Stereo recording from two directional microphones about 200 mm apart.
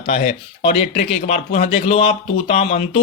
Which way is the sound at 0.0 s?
30° left (ahead or behind).